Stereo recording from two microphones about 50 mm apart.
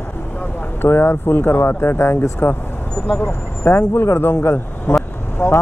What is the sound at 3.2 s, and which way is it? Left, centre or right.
Speech, left.